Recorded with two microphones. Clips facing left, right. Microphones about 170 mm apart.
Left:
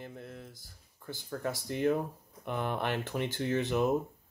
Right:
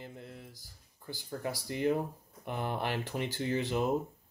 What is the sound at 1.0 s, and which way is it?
Speech, 10° right (ahead or behind).